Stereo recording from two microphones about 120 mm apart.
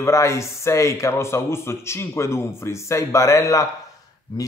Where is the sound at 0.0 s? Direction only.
25° left (ahead or behind).